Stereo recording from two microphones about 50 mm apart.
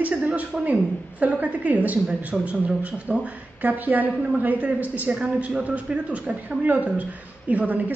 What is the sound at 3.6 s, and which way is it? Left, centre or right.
A woman's voice, right.